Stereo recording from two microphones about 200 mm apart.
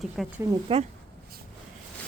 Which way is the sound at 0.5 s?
30° right (ahead or behind).